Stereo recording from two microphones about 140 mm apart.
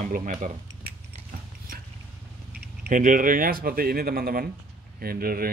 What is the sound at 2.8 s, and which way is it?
Speech, 70° right (ahead or behind).